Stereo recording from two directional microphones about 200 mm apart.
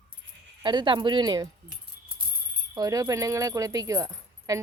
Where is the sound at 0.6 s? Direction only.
25° right (ahead or behind).